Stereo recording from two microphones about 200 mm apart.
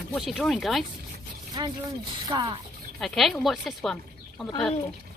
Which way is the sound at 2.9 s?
Centre (ahead or behind).